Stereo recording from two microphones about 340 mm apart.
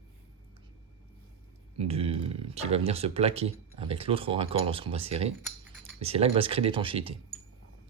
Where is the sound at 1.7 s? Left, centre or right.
Centre.